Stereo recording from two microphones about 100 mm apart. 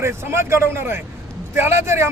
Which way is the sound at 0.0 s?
25° right (ahead or behind).